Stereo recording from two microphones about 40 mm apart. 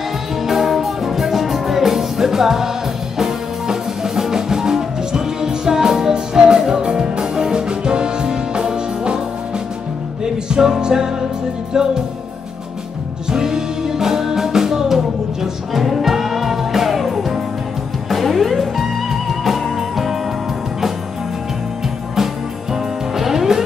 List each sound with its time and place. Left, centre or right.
0.4 s music: centre
10.2 s music: centre
13.3 s music: centre
22.1 s music: centre